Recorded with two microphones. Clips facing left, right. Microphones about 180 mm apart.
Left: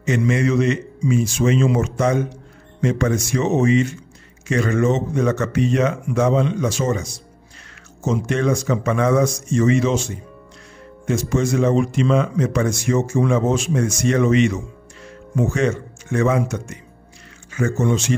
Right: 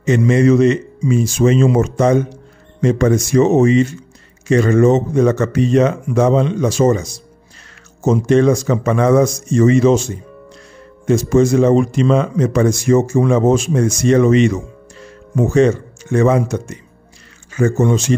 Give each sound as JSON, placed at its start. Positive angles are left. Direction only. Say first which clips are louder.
{"t": 0.0, "sound": "a man's voice", "louder": "right 6 dB", "side_deg": -35}
{"t": 11.1, "sound": "a man's voice", "louder": "right 7 dB", "side_deg": -40}